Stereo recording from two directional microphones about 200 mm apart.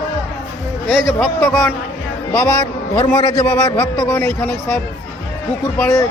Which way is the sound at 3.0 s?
25° left (ahead or behind).